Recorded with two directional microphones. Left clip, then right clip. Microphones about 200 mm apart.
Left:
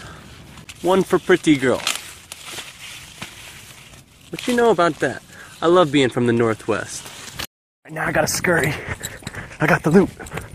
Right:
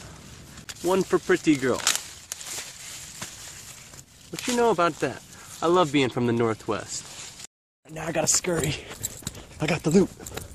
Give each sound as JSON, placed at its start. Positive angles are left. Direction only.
{"t": 0.8, "sound": "speech", "side_deg": 20}
{"t": 4.6, "sound": "speech", "side_deg": 15}